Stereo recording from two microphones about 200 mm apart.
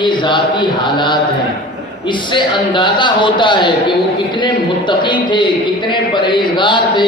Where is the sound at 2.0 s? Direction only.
25° left (ahead or behind).